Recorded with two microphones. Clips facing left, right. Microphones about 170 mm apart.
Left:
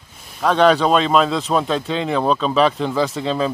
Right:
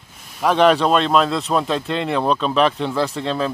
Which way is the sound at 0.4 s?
5° right (ahead or behind).